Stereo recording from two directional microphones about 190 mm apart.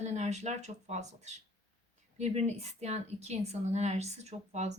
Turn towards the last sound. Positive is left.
turn(degrees=-35)  # may be behind; listen again after turning